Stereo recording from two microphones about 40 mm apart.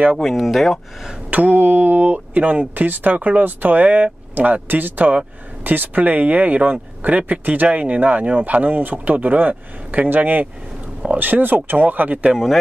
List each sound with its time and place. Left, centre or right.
0.2 s speech: centre
1.3 s speech: right
2.7 s speech: right